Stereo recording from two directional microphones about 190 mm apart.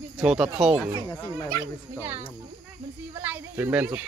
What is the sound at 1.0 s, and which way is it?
Speech, 15° left (ahead or behind).